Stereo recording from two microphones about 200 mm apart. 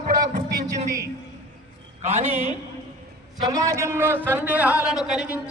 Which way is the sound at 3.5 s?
15° right (ahead or behind).